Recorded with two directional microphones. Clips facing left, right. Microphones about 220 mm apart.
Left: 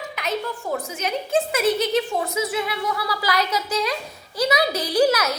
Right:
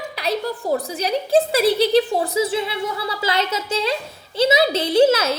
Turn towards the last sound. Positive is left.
turn(degrees=-25)  # may be behind; listen again after turning